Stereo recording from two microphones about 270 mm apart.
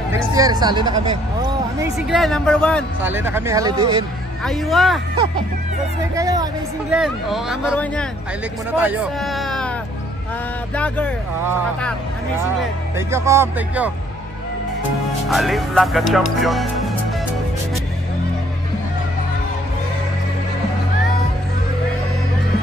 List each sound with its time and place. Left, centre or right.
0.1 s speech: centre
2.0 s speech: centre
3.0 s speech: centre
4.5 s speech: centre
6.1 s speech: centre
6.9 s speech: centre
8.7 s speech: centre
10.8 s speech: centre
12.9 s speech: centre
15.2 s speech: centre